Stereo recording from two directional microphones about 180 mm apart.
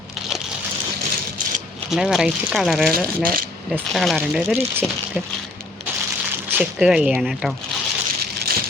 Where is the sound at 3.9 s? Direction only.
Centre (ahead or behind).